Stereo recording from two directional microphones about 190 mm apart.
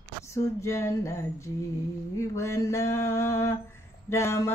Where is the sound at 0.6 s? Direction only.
15° left (ahead or behind).